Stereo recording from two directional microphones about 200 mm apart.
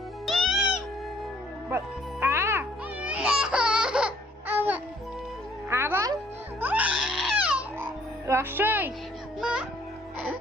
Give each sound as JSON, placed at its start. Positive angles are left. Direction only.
{"t": 0.3, "sound": "music", "side_deg": 0}
{"t": 2.2, "sound": "music", "side_deg": -10}
{"t": 6.6, "sound": "goat", "side_deg": -10}
{"t": 8.3, "sound": "music", "side_deg": -10}